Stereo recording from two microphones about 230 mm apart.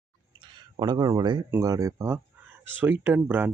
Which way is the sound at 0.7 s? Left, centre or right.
Centre.